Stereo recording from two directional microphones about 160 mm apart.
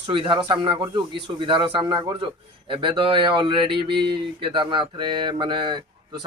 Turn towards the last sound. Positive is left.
turn(degrees=-30)  # may be behind; listen again after turning